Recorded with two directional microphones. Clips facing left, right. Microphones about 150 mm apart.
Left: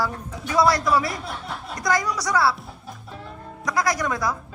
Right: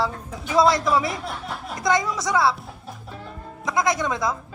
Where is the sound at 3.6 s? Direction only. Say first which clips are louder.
Right 1 dB; 20° right (ahead or behind).